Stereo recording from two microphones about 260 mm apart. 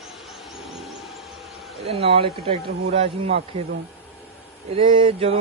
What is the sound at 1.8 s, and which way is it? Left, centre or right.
A man's voice, right.